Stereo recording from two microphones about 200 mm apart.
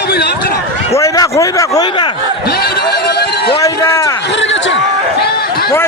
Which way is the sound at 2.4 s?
50° left (ahead or behind).